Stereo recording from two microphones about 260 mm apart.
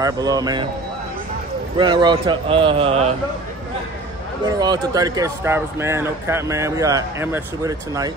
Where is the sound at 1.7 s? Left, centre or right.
Centre.